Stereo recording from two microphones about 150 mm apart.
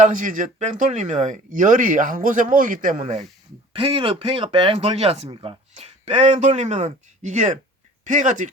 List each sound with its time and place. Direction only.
0.0 s speech: 60° right (ahead or behind)
3.7 s speech: 35° right (ahead or behind); by 8.4 s 55° right (ahead or behind)